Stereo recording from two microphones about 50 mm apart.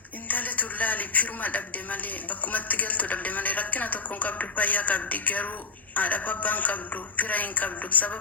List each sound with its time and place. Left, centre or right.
0.3 s a man's voice: left